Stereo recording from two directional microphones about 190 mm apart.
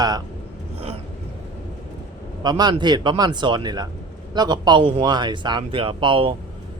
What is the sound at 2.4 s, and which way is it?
Speech, 20° right (ahead or behind).